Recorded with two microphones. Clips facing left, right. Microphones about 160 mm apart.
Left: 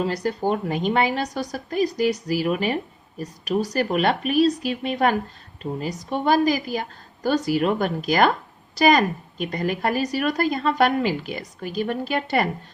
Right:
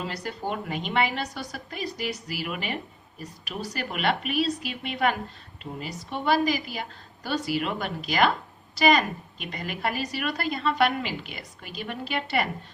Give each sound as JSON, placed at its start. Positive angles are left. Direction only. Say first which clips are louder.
{"t": 0.0, "sound": "a woman's voice", "louder": "left 9 dB", "side_deg": 40}